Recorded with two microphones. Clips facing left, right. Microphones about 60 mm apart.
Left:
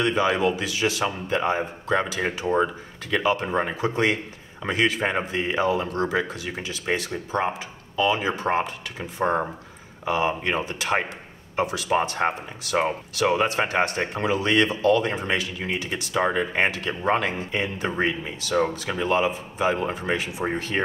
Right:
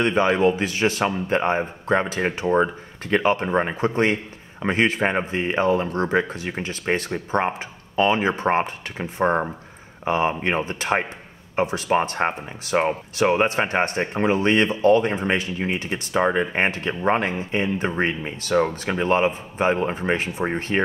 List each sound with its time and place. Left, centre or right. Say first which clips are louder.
0.0 s speech: right 3 dB; right